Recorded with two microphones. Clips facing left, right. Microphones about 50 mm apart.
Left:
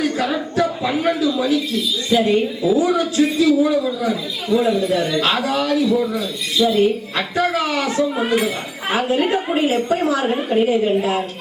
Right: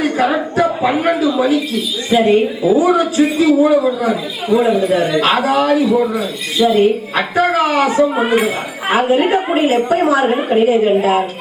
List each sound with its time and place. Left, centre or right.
0.0 s a man's voice: right